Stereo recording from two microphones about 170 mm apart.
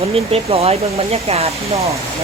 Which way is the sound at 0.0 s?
35° right (ahead or behind).